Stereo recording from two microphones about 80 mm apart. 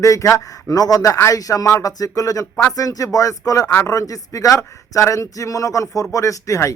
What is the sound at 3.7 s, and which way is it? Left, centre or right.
Speech, left.